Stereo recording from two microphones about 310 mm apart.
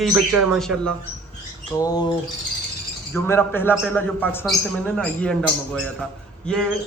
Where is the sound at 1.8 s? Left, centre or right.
Centre.